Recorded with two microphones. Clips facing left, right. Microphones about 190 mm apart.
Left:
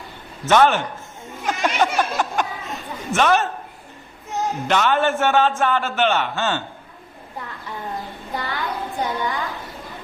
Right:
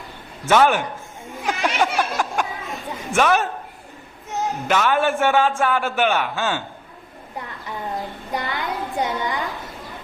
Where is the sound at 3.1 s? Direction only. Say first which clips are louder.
Even; 5° right (ahead or behind).